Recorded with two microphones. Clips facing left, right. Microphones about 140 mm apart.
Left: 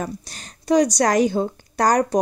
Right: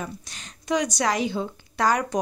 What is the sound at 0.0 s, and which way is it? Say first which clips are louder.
Speech: left 5 dB; 35° left (ahead or behind).